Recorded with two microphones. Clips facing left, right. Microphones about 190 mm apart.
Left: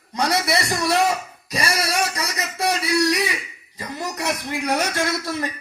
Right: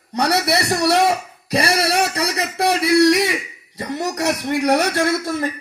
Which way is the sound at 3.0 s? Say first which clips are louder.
Right 6 dB; 70° right (ahead or behind).